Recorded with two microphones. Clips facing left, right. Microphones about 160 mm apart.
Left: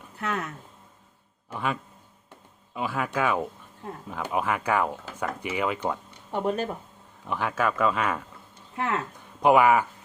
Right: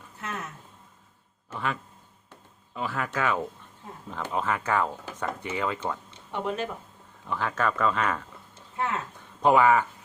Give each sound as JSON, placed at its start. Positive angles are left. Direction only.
{"t": 0.2, "sound": "speech", "side_deg": 70}
{"t": 1.5, "sound": "speech", "side_deg": 15}
{"t": 6.3, "sound": "speech", "side_deg": 40}
{"t": 7.3, "sound": "speech", "side_deg": 15}
{"t": 9.4, "sound": "speech", "side_deg": 15}